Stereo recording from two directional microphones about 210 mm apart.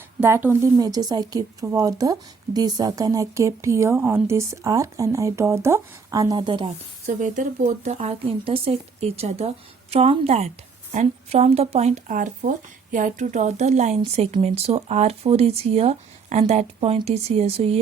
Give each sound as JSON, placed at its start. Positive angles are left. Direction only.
{"t": 0.2, "sound": "speech", "side_deg": -10}
{"t": 7.2, "sound": "speech", "side_deg": -35}